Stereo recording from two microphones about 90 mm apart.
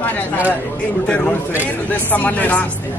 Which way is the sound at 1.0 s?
10° left (ahead or behind).